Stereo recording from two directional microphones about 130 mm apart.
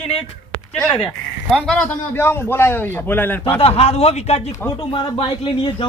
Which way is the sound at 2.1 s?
20° left (ahead or behind).